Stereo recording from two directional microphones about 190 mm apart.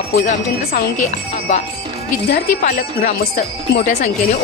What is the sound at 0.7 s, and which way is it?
A woman's voice, 35° left (ahead or behind).